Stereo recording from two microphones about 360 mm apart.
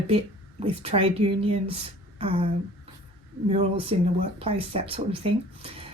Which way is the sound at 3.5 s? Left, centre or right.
Centre.